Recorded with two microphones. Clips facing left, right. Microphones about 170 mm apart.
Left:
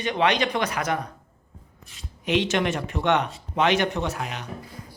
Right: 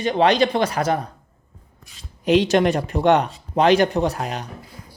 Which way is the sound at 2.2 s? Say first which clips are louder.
Right 7 dB; 35° right (ahead or behind).